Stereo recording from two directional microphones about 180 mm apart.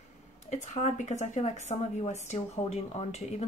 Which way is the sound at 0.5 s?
40° left (ahead or behind).